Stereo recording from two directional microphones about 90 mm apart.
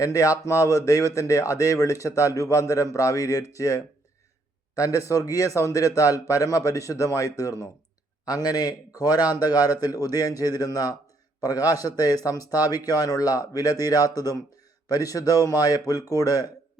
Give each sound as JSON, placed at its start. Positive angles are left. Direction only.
{"t": 0.0, "sound": "speech", "side_deg": 40}